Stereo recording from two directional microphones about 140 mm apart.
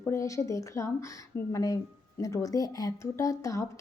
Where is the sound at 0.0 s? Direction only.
20° left (ahead or behind).